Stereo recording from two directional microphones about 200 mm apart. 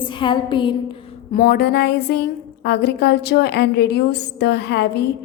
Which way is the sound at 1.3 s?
50° left (ahead or behind).